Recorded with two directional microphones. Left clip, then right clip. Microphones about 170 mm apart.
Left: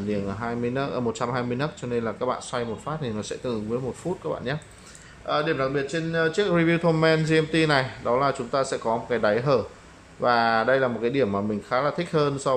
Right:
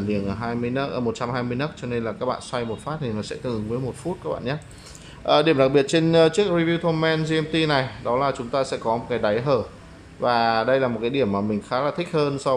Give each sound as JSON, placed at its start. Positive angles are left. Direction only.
{"t": 0.1, "sound": "speech", "side_deg": -5}
{"t": 5.2, "sound": "speech", "side_deg": -20}
{"t": 6.4, "sound": "speech", "side_deg": 0}